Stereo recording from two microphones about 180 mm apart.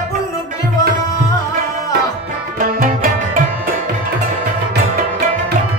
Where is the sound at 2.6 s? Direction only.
50° right (ahead or behind).